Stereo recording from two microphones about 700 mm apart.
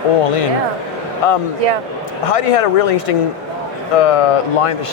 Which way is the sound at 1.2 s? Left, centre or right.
Left.